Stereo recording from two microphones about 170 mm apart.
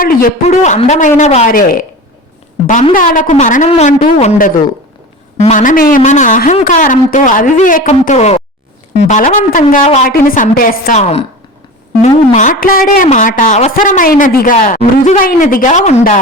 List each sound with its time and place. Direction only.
0.0 s a man's voice: 55° left (ahead or behind)
0.4 s speech: 40° left (ahead or behind)
2.9 s speech: 55° left (ahead or behind)
9.8 s speech: 40° left (ahead or behind)
10.1 s a woman's voice: 55° left (ahead or behind)
12.0 s speech: 45° left (ahead or behind)